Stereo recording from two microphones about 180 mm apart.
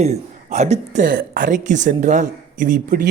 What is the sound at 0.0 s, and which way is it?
A woman's voice, 40° right (ahead or behind).